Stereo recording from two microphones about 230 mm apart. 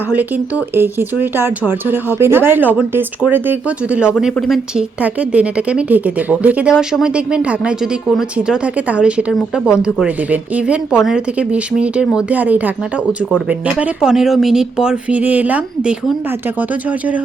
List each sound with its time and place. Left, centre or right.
0.1 s speech: centre